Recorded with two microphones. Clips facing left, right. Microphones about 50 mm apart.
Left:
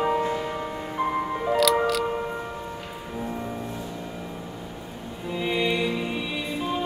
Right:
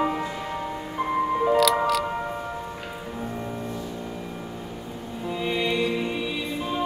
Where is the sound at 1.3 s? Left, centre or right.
Centre.